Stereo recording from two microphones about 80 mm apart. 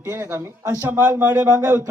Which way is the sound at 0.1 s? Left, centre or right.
Right.